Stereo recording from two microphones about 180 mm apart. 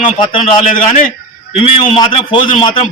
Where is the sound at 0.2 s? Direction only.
25° left (ahead or behind).